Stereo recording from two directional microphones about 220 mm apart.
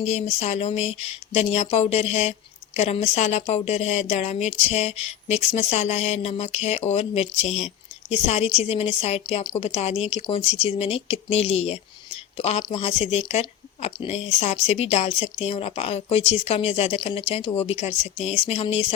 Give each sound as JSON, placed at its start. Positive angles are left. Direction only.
{"t": 0.0, "sound": "a woman's voice", "side_deg": 30}
{"t": 1.7, "sound": "a sound", "side_deg": 30}
{"t": 2.7, "sound": "a woman's voice", "side_deg": 30}